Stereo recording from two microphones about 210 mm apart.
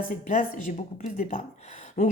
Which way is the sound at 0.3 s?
40° left (ahead or behind).